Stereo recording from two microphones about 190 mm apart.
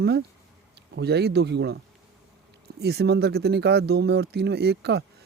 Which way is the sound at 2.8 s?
60° right (ahead or behind).